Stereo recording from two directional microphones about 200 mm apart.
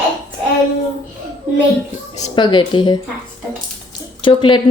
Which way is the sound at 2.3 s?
25° left (ahead or behind).